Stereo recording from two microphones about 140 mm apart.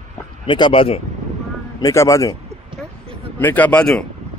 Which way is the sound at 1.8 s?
20° left (ahead or behind).